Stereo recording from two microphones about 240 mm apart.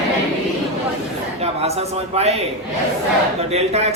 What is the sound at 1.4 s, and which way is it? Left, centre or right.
Speech, right.